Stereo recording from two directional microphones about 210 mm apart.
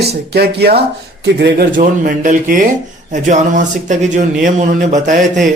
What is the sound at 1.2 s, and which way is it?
Speech, 50° right (ahead or behind).